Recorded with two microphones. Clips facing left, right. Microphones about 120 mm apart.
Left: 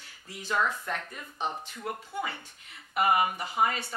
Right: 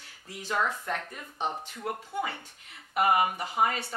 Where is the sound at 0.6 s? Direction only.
35° right (ahead or behind).